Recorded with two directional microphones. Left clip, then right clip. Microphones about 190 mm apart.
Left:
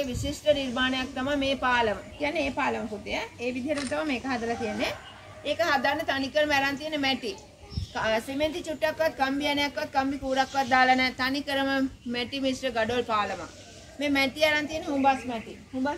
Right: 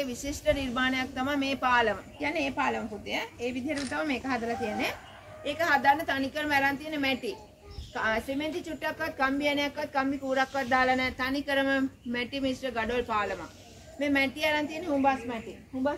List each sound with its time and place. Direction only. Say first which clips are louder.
0.0 s a woman's voice: left 2 dB; 25° left (ahead or behind); by 15.3 s 50° left (ahead or behind)